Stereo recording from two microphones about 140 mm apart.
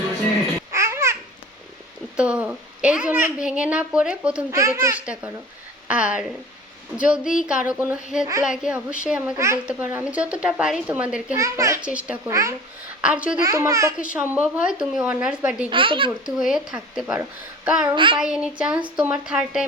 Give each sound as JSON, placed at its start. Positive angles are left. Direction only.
{"t": 0.7, "sound": "babbling", "side_deg": -20}
{"t": 2.1, "sound": "a woman's voice", "side_deg": -10}
{"t": 9.3, "sound": "a child's voice", "side_deg": -20}
{"t": 11.3, "sound": "a child's voice", "side_deg": -20}
{"t": 11.8, "sound": "a woman's voice", "side_deg": -10}
{"t": 12.3, "sound": "a child's voice", "side_deg": -20}
{"t": 13.0, "sound": "a woman's voice", "side_deg": -10}
{"t": 13.4, "sound": "a child's voice", "side_deg": -25}
{"t": 14.0, "sound": "a woman's voice", "side_deg": -10}
{"t": 15.7, "sound": "a child's voice", "side_deg": -35}
{"t": 16.2, "sound": "speech", "side_deg": -5}
{"t": 17.9, "sound": "a child's voice", "side_deg": -35}
{"t": 18.2, "sound": "speech", "side_deg": -5}